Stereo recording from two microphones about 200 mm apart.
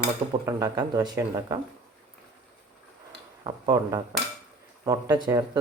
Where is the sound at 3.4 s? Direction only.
20° right (ahead or behind).